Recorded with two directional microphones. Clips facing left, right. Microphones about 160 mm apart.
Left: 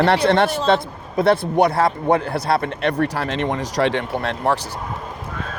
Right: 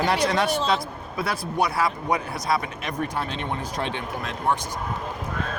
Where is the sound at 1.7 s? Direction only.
55° left (ahead or behind); by 4.6 s 90° left.